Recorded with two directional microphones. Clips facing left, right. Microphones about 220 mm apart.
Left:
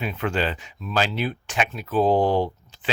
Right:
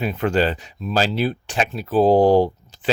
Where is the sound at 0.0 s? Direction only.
40° right (ahead or behind).